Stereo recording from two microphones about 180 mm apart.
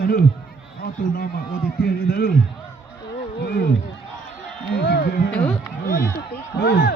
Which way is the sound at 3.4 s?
60° left (ahead or behind).